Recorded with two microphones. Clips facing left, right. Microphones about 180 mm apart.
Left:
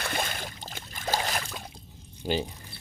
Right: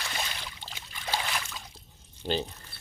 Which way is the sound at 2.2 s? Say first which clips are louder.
Left 2 dB; 10° left (ahead or behind).